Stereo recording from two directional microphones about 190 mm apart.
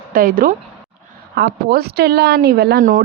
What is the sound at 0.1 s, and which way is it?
A woman's voice, 50° right (ahead or behind).